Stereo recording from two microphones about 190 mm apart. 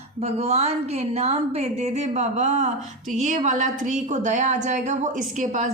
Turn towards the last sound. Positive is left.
turn(degrees=-40)  # may be behind; listen again after turning